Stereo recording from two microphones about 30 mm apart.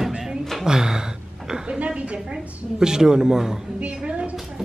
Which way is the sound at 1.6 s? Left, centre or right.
Right.